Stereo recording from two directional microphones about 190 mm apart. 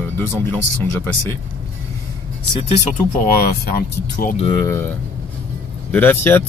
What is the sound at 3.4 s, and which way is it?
Speech, 50° left (ahead or behind).